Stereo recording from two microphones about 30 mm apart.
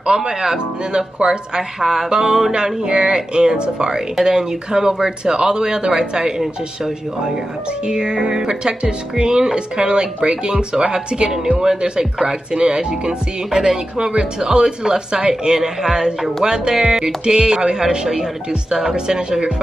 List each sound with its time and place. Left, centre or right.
0.0 s speech: right
1.8 s speech: centre
2.0 s speech: right
5.0 s speech: right
7.8 s speech: right
13.5 s speech: centre
15.8 s speech: centre
17.8 s speech: centre
18.5 s speech: right